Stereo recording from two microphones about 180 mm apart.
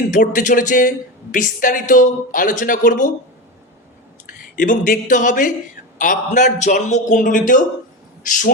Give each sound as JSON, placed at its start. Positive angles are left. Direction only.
{"t": 0.1, "sound": "a woman's voice", "side_deg": 45}
{"t": 4.5, "sound": "a woman's voice", "side_deg": 45}